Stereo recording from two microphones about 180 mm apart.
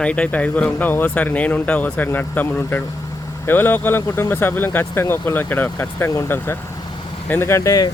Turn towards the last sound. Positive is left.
turn(degrees=20)  # may be behind; listen again after turning